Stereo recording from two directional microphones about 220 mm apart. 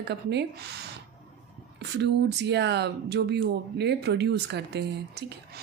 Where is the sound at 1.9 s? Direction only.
50° right (ahead or behind).